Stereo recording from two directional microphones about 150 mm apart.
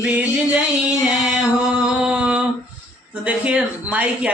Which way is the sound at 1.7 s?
5° right (ahead or behind).